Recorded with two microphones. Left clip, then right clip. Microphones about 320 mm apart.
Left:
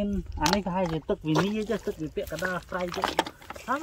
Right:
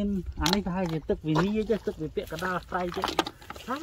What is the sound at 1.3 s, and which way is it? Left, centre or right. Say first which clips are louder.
Speech: left 1 dB; left.